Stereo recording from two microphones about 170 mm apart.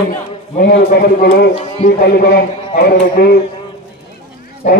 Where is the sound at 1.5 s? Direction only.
40° left (ahead or behind).